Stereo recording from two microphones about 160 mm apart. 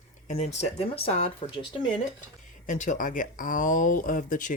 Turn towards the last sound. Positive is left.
turn(degrees=55)  # may be behind; listen again after turning